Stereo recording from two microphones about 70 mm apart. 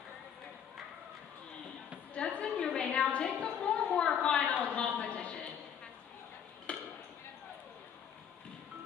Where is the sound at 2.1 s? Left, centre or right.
Centre.